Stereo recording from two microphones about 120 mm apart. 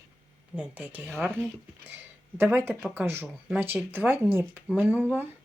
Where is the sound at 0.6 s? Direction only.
15° right (ahead or behind).